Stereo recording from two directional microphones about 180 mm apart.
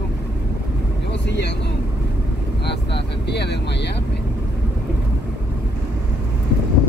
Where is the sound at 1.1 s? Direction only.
75° left (ahead or behind).